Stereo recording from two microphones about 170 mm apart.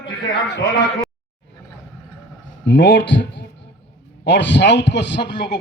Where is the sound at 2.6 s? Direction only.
90° left.